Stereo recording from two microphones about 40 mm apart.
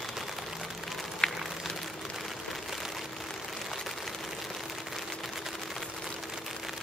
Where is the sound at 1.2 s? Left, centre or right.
Centre.